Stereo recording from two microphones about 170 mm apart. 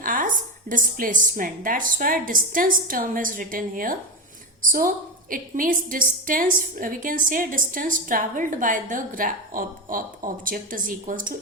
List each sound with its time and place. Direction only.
0.0 s a woman's voice: 55° right (ahead or behind)